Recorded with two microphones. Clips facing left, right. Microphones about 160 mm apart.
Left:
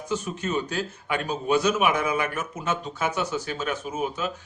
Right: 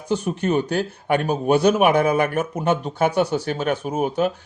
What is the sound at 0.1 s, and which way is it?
Speech, 60° right (ahead or behind).